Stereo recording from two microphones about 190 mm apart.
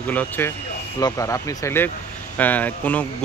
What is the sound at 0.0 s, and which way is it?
Speech, 10° left (ahead or behind).